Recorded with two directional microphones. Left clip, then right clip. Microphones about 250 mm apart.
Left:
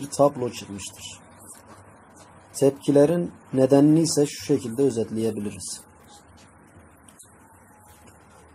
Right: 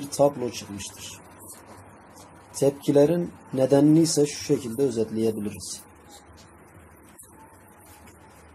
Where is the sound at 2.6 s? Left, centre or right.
Centre.